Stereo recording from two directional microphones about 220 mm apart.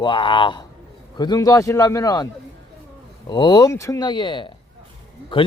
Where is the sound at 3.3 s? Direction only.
20° left (ahead or behind).